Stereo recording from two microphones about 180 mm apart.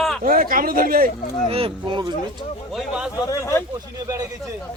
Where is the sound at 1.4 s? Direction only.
30° right (ahead or behind).